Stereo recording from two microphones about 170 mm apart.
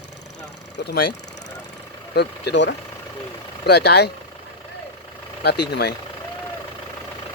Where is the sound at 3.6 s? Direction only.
75° left (ahead or behind).